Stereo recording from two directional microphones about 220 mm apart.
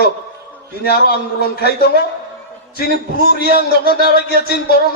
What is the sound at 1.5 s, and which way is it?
Speech, 45° left (ahead or behind).